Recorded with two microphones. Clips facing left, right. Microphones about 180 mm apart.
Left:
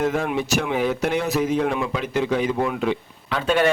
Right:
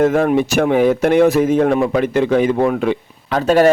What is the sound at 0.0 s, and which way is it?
Speech, 50° right (ahead or behind).